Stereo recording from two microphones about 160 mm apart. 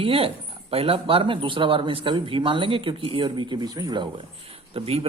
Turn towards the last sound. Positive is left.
turn(degrees=-35)  # may be behind; listen again after turning